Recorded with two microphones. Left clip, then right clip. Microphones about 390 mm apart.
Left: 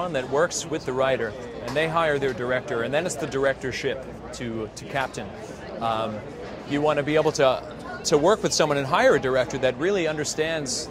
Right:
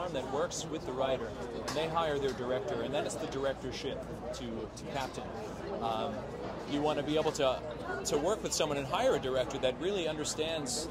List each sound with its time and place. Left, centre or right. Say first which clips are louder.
0.1 s speech: left 11 dB; left
1.8 s speech: left 10 dB; left
6.8 s speech: left 10 dB; left